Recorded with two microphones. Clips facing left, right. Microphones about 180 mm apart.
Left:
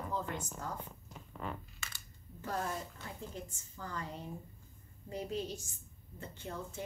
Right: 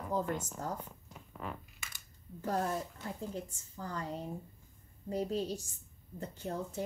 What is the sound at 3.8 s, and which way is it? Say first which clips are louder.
Speech: right 3 dB; 35° right (ahead or behind).